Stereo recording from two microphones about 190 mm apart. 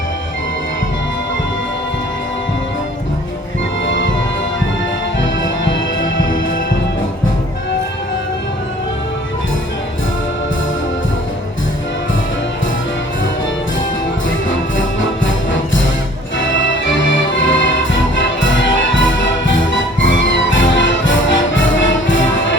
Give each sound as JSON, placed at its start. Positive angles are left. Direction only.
{"t": 3.8, "sound": "music", "side_deg": 75}
{"t": 6.0, "sound": "music", "side_deg": 80}
{"t": 17.1, "sound": "music", "side_deg": 80}